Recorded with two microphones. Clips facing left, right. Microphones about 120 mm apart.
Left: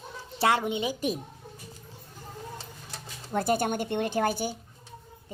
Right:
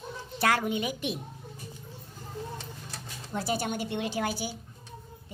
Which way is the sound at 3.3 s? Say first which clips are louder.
Left 5 dB; 50° left (ahead or behind).